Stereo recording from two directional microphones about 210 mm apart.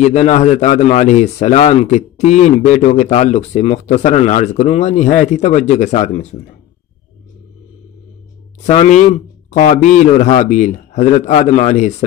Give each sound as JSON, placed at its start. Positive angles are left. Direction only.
{"t": 0.0, "sound": "a man's voice", "side_deg": 35}
{"t": 8.6, "sound": "a man's voice", "side_deg": 35}